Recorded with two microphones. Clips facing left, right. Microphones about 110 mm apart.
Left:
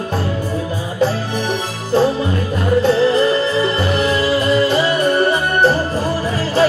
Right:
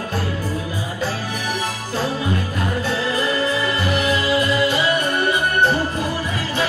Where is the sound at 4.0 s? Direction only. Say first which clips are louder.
Left 2 dB; 30° left (ahead or behind).